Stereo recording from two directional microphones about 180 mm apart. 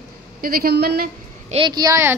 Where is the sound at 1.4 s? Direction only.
30° right (ahead or behind).